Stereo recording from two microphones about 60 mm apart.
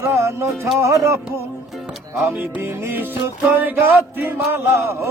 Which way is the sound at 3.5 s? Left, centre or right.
Right.